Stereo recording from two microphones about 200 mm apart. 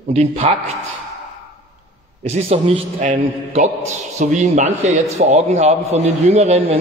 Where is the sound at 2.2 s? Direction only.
30° right (ahead or behind).